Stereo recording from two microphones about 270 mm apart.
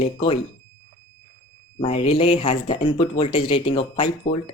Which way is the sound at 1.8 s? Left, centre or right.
Left.